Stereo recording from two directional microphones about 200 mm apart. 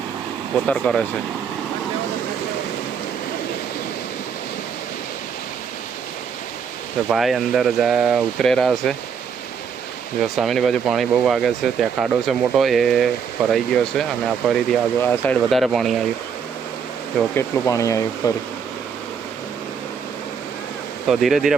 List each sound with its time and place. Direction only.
0.5 s speech: 5° left (ahead or behind)
7.1 s speech: centre (ahead or behind)
10.2 s speech: centre (ahead or behind)
17.3 s speech: 15° left (ahead or behind)
21.1 s speech: centre (ahead or behind)